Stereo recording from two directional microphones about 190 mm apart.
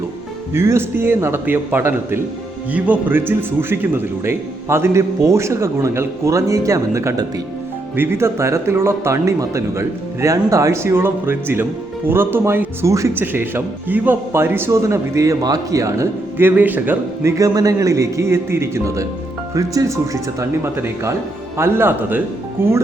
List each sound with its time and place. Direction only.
0.5 s speech: 15° right (ahead or behind)